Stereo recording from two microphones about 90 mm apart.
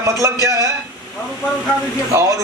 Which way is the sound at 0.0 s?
40° right (ahead or behind).